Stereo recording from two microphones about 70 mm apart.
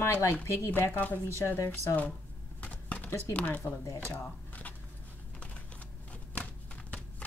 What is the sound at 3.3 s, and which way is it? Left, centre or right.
Speech, left.